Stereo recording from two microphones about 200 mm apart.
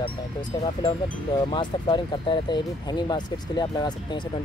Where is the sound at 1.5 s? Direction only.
25° left (ahead or behind).